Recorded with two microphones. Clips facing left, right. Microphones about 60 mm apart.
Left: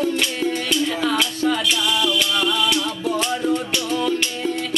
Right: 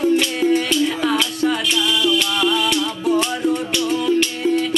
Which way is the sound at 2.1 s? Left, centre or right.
Right.